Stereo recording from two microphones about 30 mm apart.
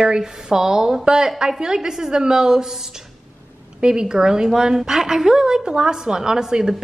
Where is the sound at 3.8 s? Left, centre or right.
Right.